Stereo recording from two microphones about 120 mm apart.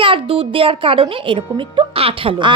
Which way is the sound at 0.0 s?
45° right (ahead or behind).